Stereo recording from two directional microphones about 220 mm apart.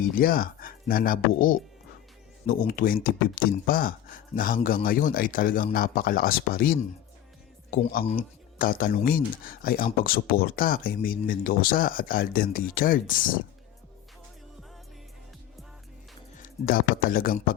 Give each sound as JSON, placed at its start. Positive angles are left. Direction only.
{"t": 0.0, "sound": "speech", "side_deg": 40}
{"t": 2.6, "sound": "speech", "side_deg": 40}
{"t": 8.5, "sound": "speech", "side_deg": 40}
{"t": 16.4, "sound": "speech", "side_deg": 40}